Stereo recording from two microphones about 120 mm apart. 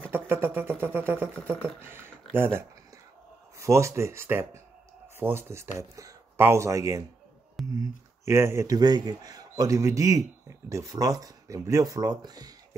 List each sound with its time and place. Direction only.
0.0 s speech: 15° right (ahead or behind); by 12.5 s 35° right (ahead or behind)